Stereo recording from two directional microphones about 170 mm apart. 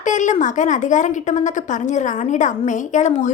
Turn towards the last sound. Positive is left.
turn(degrees=45)  # may be behind; listen again after turning